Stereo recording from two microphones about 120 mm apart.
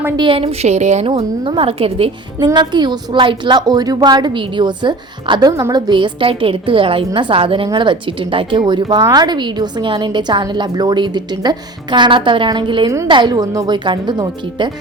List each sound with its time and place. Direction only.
0.2 s a woman's voice: 50° right (ahead or behind); by 1.0 s 75° right (ahead or behind)
1.0 s a woman's voice: 50° right (ahead or behind)
2.4 s a woman's voice: 40° right (ahead or behind)